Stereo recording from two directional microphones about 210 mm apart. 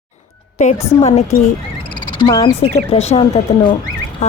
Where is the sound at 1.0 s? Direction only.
30° left (ahead or behind).